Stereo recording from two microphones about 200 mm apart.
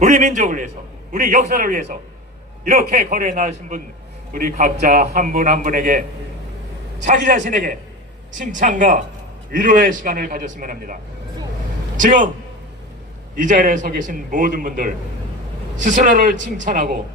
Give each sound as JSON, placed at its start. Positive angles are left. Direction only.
{"t": 0.0, "sound": "a man's voice", "side_deg": -40}
{"t": 7.0, "sound": "a man's voice", "side_deg": -40}
{"t": 11.9, "sound": "a man's voice", "side_deg": -40}
{"t": 13.3, "sound": "a man's voice", "side_deg": -40}